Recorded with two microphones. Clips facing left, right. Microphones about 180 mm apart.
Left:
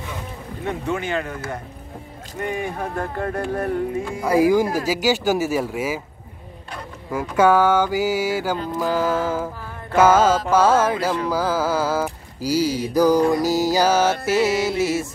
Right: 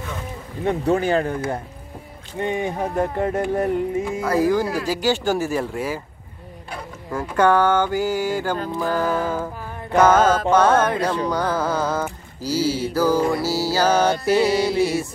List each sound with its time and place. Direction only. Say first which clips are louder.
0.7 s speech: right 6 dB; 35° right (ahead or behind)
2.4 s speech: right 3 dB; 20° right (ahead or behind)
4.2 s speech: left 4 dB; 10° left (ahead or behind)
7.1 s mantra: left 1 dB; 5° left (ahead or behind)
8.7 s speech: left 1 dB; 5° left (ahead or behind)
10.5 s mantra: even; 5° left (ahead or behind)